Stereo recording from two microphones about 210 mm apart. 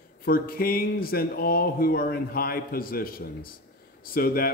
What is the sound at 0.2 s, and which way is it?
A man's voice, 45° left (ahead or behind).